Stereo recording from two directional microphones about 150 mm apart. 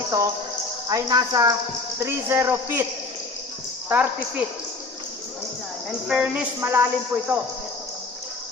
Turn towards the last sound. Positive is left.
turn(degrees=-15)  # may be behind; listen again after turning